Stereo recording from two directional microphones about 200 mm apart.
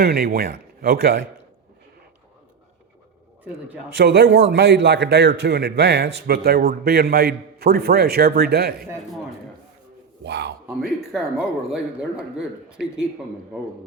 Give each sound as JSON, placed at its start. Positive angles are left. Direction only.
{"t": 0.0, "sound": "a man's voice", "side_deg": -50}
{"t": 3.9, "sound": "a man's voice", "side_deg": -55}
{"t": 10.2, "sound": "a man's voice", "side_deg": -60}
{"t": 10.7, "sound": "speech", "side_deg": -5}